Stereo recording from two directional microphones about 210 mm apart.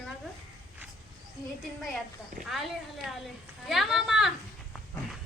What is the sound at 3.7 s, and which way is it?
Speech, centre (ahead or behind).